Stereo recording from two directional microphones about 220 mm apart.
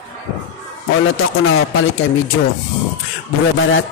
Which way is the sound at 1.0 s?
65° left (ahead or behind).